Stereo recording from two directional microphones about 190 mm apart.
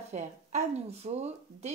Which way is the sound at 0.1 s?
35° right (ahead or behind).